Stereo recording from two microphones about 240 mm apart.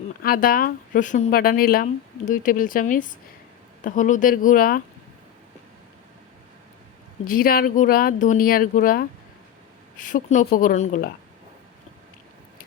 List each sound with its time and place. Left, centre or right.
0.2 s speech: left
7.3 s speech: left